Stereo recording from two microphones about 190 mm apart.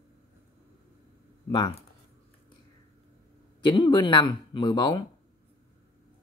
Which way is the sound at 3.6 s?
25° left (ahead or behind).